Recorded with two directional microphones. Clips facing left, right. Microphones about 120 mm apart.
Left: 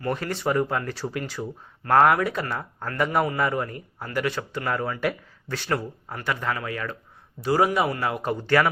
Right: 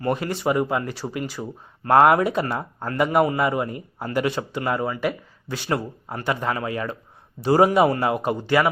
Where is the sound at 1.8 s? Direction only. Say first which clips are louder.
Right 3 dB; 20° right (ahead or behind).